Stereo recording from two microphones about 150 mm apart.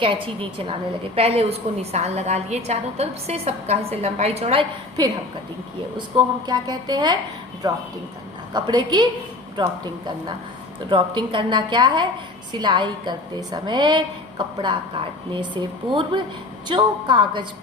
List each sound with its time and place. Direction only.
0.0 s a woman's voice: 35° right (ahead or behind)
5.0 s a woman's voice: 30° right (ahead or behind)
10.8 s a woman's voice: 30° right (ahead or behind)